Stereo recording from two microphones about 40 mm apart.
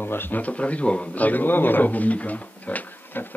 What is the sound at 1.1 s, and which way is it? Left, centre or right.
Speech, left.